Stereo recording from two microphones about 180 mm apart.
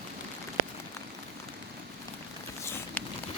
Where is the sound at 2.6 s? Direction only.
10° left (ahead or behind).